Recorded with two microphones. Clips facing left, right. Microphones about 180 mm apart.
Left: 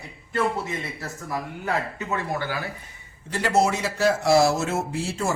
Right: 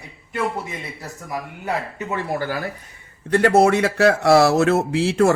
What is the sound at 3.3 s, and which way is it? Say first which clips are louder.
Speech: right 7 dB; 60° right (ahead or behind).